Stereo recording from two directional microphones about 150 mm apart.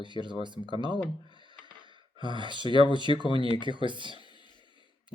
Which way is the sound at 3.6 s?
30° right (ahead or behind).